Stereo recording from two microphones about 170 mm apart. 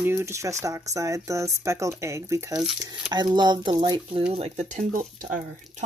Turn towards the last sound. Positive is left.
turn(degrees=-50)  # may be behind; listen again after turning